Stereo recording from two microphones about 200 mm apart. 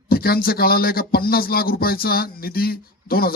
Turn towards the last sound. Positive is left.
turn(degrees=50)  # may be behind; listen again after turning